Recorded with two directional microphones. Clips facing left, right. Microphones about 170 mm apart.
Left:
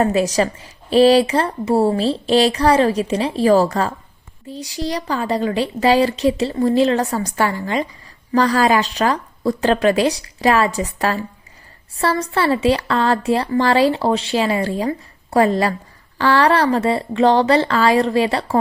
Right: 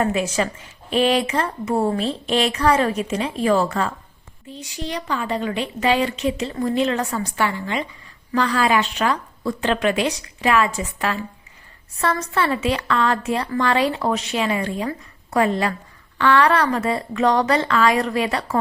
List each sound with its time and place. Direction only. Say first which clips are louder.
0.0 s a woman's voice: left 4 dB; 35° left (ahead or behind)